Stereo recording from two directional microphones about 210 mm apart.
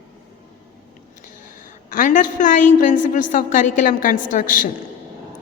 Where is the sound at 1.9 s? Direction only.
40° left (ahead or behind).